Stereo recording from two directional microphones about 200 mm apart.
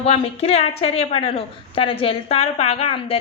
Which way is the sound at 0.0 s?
30° left (ahead or behind).